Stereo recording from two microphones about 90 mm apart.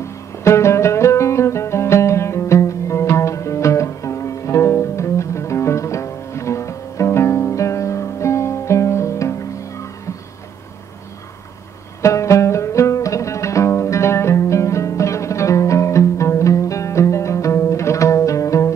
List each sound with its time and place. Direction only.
0.0 s music: 30° left (ahead or behind)
12.0 s music: 35° left (ahead or behind)